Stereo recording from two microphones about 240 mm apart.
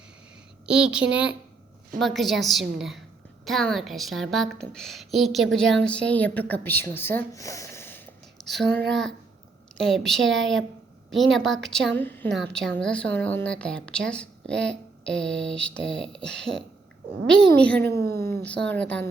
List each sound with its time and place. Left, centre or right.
0.6 s a woman's voice: centre
9.7 s a woman's voice: centre
17.8 s speech: right
18.4 s a woman's voice: centre